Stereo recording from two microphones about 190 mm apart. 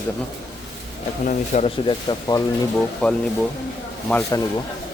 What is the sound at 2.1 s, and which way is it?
Speech, 20° left (ahead or behind).